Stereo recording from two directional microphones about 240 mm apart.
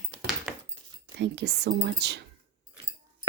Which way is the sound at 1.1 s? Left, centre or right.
Right.